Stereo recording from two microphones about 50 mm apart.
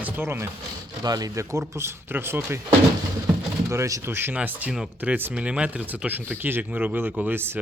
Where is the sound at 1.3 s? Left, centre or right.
Right.